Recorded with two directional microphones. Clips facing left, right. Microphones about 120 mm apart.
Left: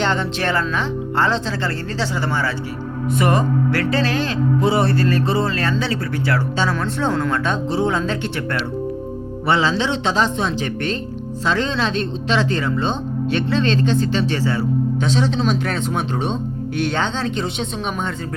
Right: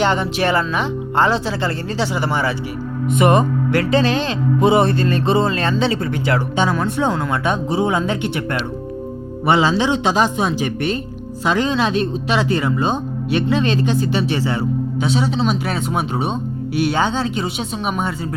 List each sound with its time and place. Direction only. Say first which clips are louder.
0.0 s speech: right 3 dB; 15° right (ahead or behind)